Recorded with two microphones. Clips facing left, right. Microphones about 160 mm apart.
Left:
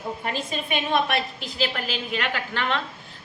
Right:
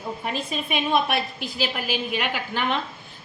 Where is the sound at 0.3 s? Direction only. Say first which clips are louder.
Right 1 dB; 5° right (ahead or behind).